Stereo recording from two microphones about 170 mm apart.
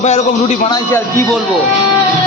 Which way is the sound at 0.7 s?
20° left (ahead or behind).